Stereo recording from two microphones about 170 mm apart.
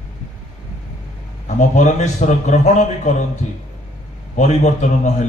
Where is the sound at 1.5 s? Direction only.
45° left (ahead or behind).